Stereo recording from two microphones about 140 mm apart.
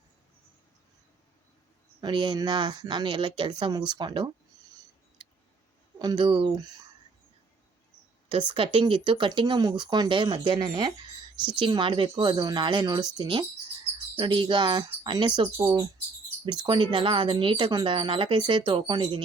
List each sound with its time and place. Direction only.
2.0 s speech: 30° right (ahead or behind)
6.0 s speech: 30° right (ahead or behind)
8.3 s speech: 40° right (ahead or behind)
16.5 s speech: 30° right (ahead or behind)